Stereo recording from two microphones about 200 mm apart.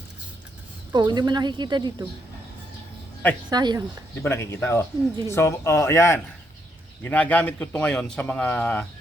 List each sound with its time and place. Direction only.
0.9 s a woman's voice: 20° right (ahead or behind)
3.5 s a woman's voice: 20° right (ahead or behind)
4.2 s a man's voice: 10° left (ahead or behind)